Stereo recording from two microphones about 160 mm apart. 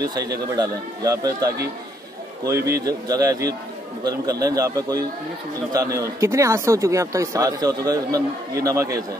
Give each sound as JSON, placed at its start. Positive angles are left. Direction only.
{"t": 0.0, "sound": "speech", "side_deg": -25}